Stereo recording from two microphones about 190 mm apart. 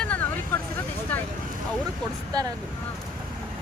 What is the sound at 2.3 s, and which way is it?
Speech, 20° right (ahead or behind).